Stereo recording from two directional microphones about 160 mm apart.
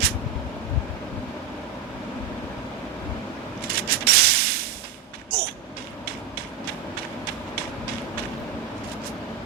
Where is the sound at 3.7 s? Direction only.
70° right (ahead or behind).